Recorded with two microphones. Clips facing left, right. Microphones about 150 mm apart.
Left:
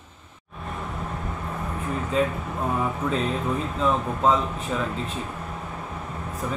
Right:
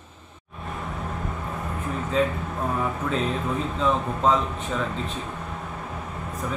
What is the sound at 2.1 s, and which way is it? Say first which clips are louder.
Speech: right 1 dB; centre (ahead or behind).